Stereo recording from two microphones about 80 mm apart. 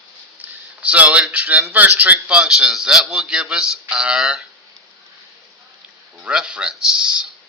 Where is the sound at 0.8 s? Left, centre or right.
Centre.